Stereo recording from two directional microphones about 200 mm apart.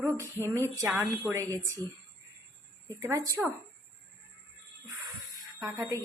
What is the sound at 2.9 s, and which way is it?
Speech, 15° right (ahead or behind).